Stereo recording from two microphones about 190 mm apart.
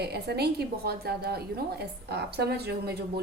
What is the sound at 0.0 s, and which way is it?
A woman's voice, 60° right (ahead or behind).